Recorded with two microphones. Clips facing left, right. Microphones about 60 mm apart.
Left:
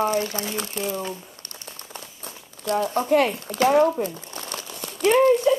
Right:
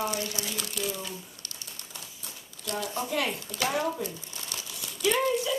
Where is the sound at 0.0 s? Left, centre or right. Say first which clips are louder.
Left 8 dB; left.